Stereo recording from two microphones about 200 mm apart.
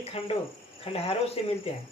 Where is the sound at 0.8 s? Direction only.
30° left (ahead or behind).